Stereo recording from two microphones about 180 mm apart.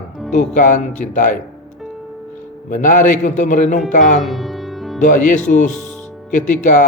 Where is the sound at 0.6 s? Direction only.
45° left (ahead or behind).